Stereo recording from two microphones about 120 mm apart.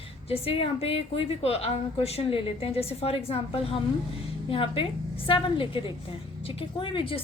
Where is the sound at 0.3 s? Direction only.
55° left (ahead or behind).